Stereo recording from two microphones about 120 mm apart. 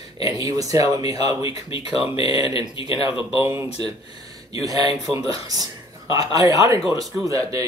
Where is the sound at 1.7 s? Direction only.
50° left (ahead or behind).